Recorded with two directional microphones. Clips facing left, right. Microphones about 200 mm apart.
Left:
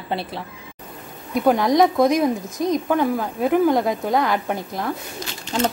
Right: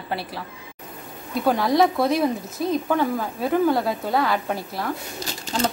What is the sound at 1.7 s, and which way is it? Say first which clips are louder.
Speech: left 2 dB; 15° left (ahead or behind).